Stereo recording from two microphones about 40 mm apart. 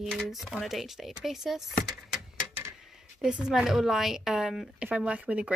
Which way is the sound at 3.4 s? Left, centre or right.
Centre.